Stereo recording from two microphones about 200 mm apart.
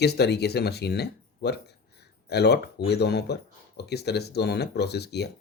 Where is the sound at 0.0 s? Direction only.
55° left (ahead or behind).